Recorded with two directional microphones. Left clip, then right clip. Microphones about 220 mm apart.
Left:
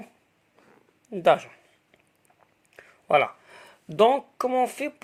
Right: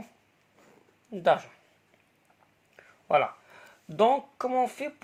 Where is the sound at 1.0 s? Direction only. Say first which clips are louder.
Left 4 dB; 40° left (ahead or behind).